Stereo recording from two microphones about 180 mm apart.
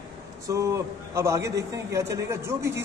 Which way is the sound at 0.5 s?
15° right (ahead or behind).